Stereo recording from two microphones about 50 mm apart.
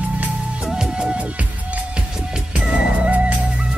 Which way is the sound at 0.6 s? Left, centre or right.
Centre.